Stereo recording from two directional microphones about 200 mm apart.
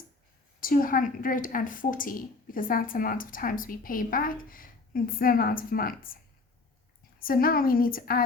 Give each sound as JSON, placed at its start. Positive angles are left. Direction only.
{"t": 0.6, "sound": "a woman's voice", "side_deg": 45}
{"t": 7.2, "sound": "a woman's voice", "side_deg": 45}